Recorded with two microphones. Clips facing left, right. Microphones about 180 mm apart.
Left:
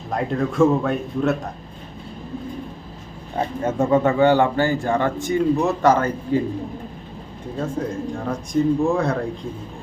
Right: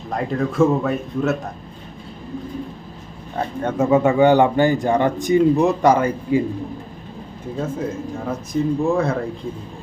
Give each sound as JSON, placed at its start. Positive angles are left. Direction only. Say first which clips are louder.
{"t": 0.1, "sound": "speech", "louder": "even", "side_deg": 0}
{"t": 3.3, "sound": "speech", "louder": "even", "side_deg": 5}
{"t": 3.8, "sound": "a man's voice", "louder": "right 2 dB", "side_deg": -10}
{"t": 7.6, "sound": "speech", "louder": "even", "side_deg": -5}